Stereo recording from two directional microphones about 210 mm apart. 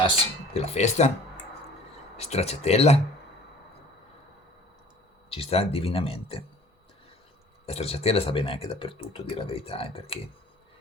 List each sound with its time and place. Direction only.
0.5 s speech: 30° left (ahead or behind)
2.1 s speech: 30° left (ahead or behind)
5.3 s speech: 30° left (ahead or behind)
7.7 s speech: 30° left (ahead or behind)